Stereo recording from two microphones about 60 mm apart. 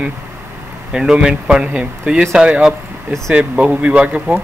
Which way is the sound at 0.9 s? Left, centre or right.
Centre.